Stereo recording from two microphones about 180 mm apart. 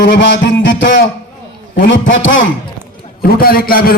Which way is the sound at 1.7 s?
90° left.